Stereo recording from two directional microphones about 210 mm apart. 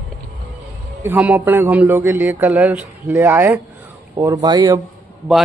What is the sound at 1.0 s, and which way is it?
A man's voice, 10° right (ahead or behind).